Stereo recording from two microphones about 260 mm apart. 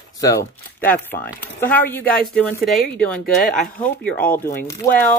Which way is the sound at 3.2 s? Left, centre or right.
Left.